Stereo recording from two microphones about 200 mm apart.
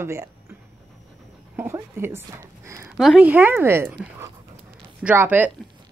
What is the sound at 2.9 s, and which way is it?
Speech, centre (ahead or behind).